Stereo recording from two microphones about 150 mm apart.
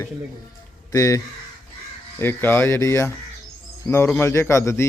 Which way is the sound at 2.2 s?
15° left (ahead or behind).